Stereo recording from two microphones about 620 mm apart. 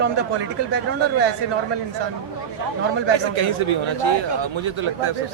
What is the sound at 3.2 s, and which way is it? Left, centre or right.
A man's voice, right.